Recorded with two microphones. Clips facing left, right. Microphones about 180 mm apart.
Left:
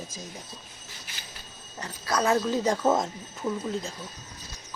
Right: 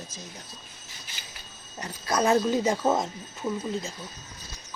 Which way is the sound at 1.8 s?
20° right (ahead or behind).